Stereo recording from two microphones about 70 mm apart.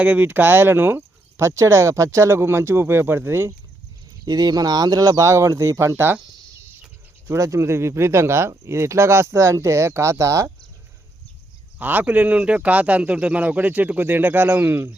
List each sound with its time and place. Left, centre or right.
0.0 s speech: right
4.3 s speech: right
7.3 s speech: right
11.8 s speech: right